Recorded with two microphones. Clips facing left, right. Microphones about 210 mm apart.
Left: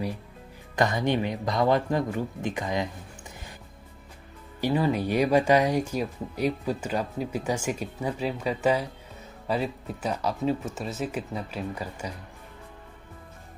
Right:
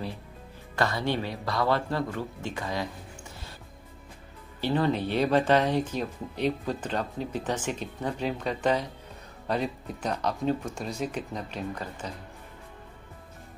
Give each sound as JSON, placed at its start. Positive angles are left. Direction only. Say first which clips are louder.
{"t": 0.7, "sound": "speech", "louder": "left 3 dB", "side_deg": 15}
{"t": 4.6, "sound": "speech", "louder": "left 1 dB", "side_deg": 10}